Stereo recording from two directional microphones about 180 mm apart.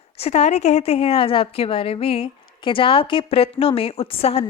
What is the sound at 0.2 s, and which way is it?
A woman's voice, 35° left (ahead or behind).